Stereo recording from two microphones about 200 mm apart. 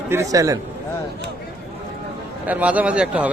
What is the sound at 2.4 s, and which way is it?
Speech, 5° right (ahead or behind).